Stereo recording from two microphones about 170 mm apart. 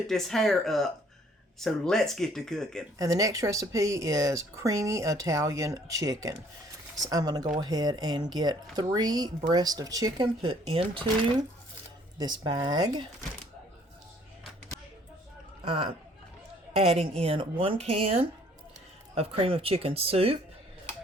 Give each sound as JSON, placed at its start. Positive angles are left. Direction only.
{"t": 0.1, "sound": "speech", "side_deg": 0}
{"t": 3.0, "sound": "speech", "side_deg": -20}
{"t": 12.2, "sound": "speech", "side_deg": -25}
{"t": 16.7, "sound": "speech", "side_deg": -40}